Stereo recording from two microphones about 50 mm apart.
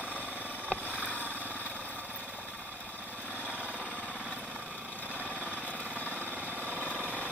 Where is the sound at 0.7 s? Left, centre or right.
Right.